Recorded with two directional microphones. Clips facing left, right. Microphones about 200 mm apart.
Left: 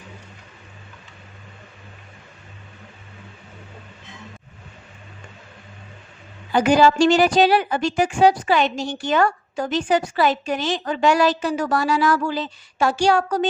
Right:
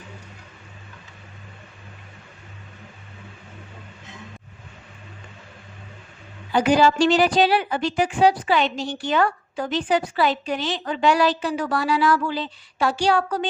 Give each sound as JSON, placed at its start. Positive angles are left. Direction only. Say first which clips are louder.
{"t": 6.5, "sound": "a woman's voice", "louder": "left 2 dB", "side_deg": 50}